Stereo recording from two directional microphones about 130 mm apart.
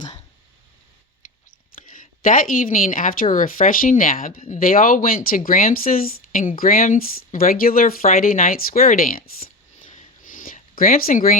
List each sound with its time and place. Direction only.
1.9 s speech: 90° left